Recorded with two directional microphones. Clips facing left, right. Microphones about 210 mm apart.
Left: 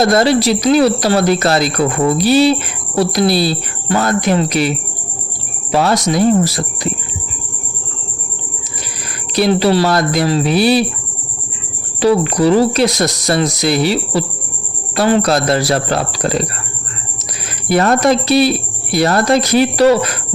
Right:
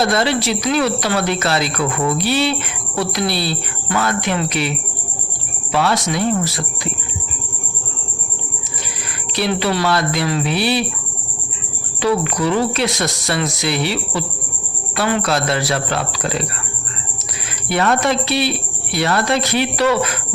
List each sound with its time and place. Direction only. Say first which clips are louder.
0.0 s speech: left 6 dB; 40° left (ahead or behind)
5.7 s speech: left 4 dB; 40° left (ahead or behind)
9.3 s speech: left 7 dB; 40° left (ahead or behind)
11.9 s speech: left 6 dB; 35° left (ahead or behind)
17.7 s speech: left 5 dB; 40° left (ahead or behind)